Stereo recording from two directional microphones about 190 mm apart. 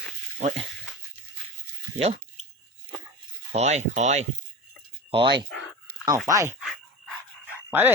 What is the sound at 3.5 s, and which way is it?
Speech, 35° right (ahead or behind).